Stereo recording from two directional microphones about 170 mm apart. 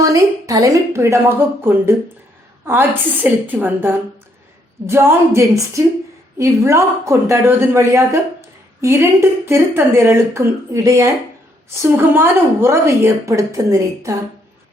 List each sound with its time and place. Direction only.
0.0 s a woman's voice: 20° right (ahead or behind)